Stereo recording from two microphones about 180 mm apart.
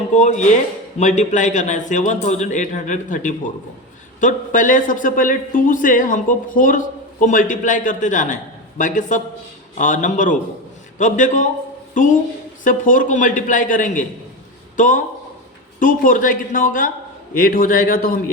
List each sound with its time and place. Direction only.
0.1 s a woman's voice: 40° left (ahead or behind)